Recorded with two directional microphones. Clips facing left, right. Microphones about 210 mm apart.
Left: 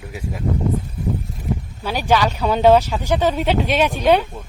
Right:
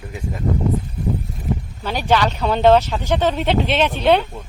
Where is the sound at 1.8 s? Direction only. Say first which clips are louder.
Even; 10° left (ahead or behind).